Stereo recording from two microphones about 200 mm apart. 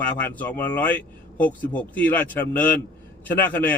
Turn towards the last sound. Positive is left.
turn(degrees=10)  # may be behind; listen again after turning